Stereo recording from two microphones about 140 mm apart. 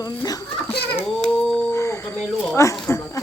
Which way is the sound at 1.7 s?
20° left (ahead or behind).